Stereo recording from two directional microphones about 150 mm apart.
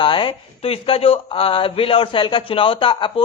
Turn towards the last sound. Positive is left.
turn(degrees=35)  # may be behind; listen again after turning